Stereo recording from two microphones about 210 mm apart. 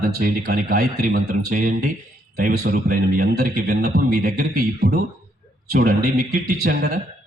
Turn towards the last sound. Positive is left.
turn(degrees=-45)  # may be behind; listen again after turning